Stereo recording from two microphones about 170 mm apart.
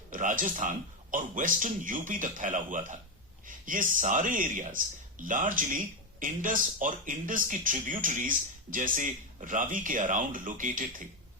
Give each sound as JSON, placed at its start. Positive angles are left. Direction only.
{"t": 0.1, "sound": "speech", "side_deg": -50}